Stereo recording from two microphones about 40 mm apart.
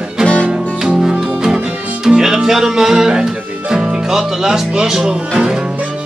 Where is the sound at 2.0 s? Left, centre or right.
Centre.